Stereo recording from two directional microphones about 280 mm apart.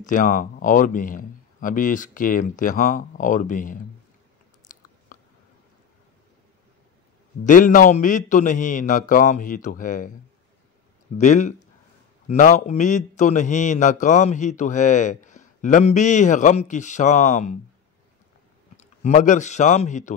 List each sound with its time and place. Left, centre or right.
0.0 s a man's voice: left
4.7 s biting: left
5.1 s a sound: left
7.4 s a man's voice: left
11.1 s a man's voice: left
18.8 s a man's voice: left